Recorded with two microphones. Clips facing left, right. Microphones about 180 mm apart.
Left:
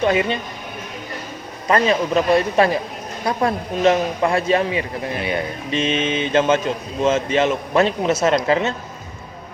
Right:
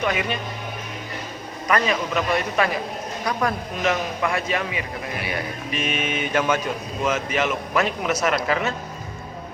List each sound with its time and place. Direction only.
0.0 s a man's voice: 30° left (ahead or behind)
1.6 s a man's voice: 30° left (ahead or behind)